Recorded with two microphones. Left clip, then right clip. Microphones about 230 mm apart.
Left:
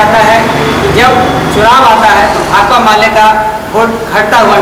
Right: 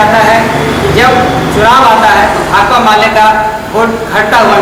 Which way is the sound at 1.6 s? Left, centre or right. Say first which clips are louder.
Even; centre.